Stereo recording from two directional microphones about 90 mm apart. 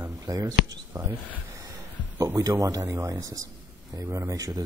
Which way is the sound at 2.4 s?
40° right (ahead or behind).